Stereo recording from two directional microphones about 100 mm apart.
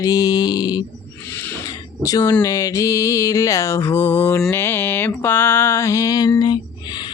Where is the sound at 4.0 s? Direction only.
20° left (ahead or behind).